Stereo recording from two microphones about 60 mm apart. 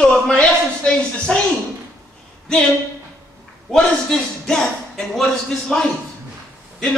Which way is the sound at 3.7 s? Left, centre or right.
Centre.